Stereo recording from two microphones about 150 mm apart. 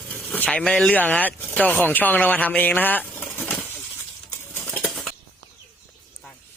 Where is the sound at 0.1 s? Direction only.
10° left (ahead or behind).